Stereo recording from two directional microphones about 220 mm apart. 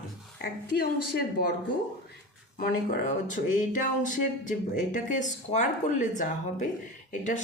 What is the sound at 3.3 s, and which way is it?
Speech, 35° left (ahead or behind).